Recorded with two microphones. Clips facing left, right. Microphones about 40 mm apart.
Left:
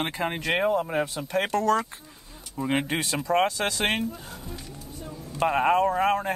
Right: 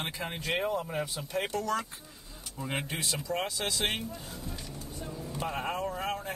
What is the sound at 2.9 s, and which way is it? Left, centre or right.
Speech, left.